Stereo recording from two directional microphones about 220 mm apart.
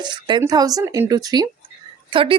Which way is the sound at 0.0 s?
20° right (ahead or behind).